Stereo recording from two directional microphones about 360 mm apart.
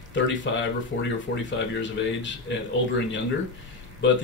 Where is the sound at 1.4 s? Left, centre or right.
Left.